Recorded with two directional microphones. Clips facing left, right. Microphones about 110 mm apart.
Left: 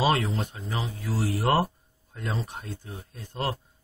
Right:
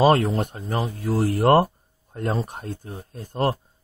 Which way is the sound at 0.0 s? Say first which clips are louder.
Right 7 dB; 45° right (ahead or behind).